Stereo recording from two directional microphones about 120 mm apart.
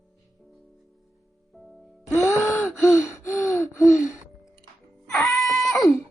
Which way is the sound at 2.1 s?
25° left (ahead or behind).